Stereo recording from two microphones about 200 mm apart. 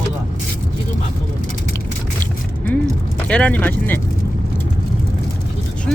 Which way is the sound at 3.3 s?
5° left (ahead or behind).